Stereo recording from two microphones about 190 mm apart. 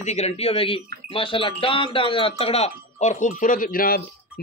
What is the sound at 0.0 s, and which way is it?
Speech, 35° left (ahead or behind).